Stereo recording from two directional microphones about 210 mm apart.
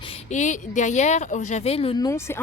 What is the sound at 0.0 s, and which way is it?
Speech, 30° left (ahead or behind).